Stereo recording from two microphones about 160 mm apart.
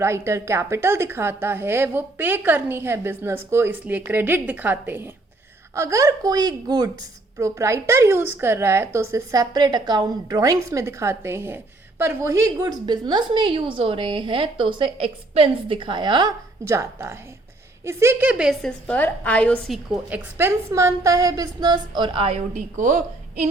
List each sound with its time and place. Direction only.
0.0 s a woman's voice: 15° right (ahead or behind)
18.9 s a woman's voice: 10° left (ahead or behind); by 22.4 s 35° right (ahead or behind)
22.5 s a woman's voice: 55° right (ahead or behind)